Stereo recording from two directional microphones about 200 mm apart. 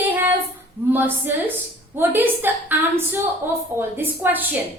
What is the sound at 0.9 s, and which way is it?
A woman's voice, 10° right (ahead or behind).